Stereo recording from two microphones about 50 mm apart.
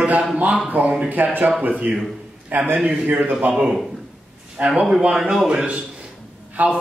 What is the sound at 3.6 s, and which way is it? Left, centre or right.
Speech, centre.